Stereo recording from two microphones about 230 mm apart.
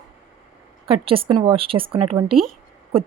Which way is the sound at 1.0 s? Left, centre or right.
Right.